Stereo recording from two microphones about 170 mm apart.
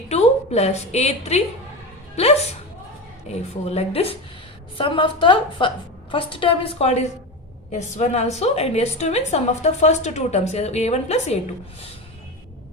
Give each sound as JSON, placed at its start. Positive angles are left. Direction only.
{"t": 0.1, "sound": "a woman's voice", "side_deg": 40}